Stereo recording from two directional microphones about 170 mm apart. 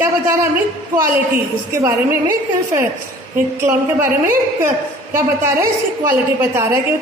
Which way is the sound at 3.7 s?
15° right (ahead or behind).